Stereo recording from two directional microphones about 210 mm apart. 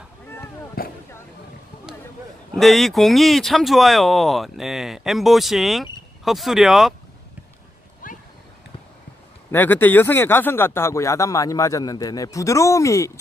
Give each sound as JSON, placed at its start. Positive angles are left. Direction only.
{"t": 0.8, "sound": "vehicle", "side_deg": 45}
{"t": 2.5, "sound": "speech", "side_deg": 0}
{"t": 8.0, "sound": "a sound", "side_deg": 40}
{"t": 9.5, "sound": "speech", "side_deg": 10}